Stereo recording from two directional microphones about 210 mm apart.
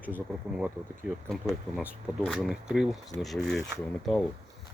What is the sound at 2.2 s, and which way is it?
Speech, centre (ahead or behind).